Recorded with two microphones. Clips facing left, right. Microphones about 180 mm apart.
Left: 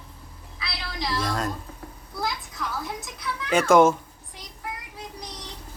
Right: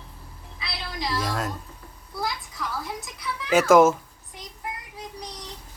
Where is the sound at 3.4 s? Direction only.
5° right (ahead or behind).